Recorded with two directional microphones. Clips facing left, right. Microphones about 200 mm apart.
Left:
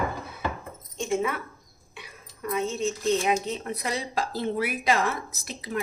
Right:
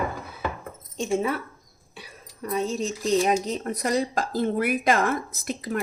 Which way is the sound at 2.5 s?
35° right (ahead or behind).